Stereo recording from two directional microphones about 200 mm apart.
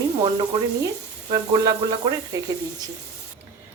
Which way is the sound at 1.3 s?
20° right (ahead or behind).